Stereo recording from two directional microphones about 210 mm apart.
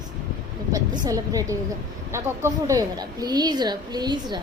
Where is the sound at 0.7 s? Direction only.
15° right (ahead or behind).